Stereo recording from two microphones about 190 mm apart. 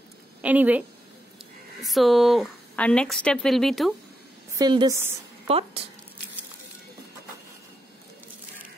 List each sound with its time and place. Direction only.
0.4 s a woman's voice: 10° right (ahead or behind)
4.6 s a woman's voice: 20° right (ahead or behind)